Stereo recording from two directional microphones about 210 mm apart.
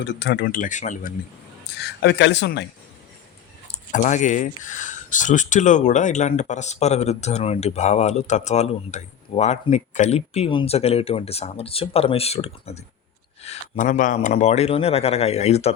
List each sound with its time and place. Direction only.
0.0 s speech: 55° left (ahead or behind); by 1.1 s 35° left (ahead or behind)
1.8 s speech: 50° left (ahead or behind)
3.9 s speech: 35° left (ahead or behind)